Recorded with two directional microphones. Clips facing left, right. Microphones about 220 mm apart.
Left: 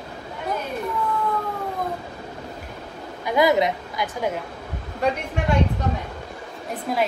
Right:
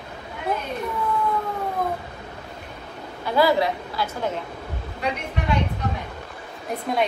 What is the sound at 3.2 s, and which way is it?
A woman's voice, 20° left (ahead or behind).